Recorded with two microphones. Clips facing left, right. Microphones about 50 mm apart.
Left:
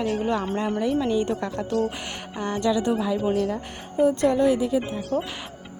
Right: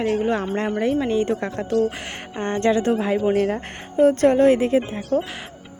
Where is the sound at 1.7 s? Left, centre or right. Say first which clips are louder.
Right 5 dB; centre.